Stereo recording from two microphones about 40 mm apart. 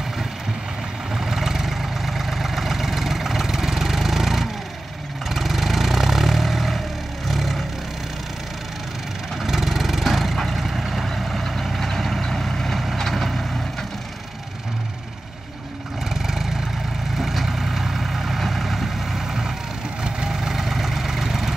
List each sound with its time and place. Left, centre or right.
1.1 s vehicle: centre
9.4 s vehicle: centre
16.1 s vehicle: centre
20.3 s vehicle: centre